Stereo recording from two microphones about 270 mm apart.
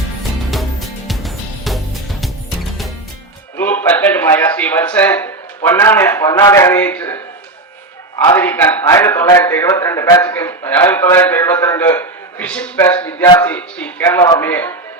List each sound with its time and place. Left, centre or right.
0.2 s music: centre
3.6 s a man's voice: centre
8.3 s a man's voice: centre